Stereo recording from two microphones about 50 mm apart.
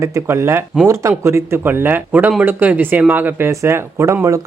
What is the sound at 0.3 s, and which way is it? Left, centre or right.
Speech, right.